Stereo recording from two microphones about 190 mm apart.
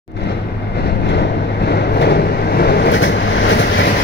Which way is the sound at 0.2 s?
60° left (ahead or behind).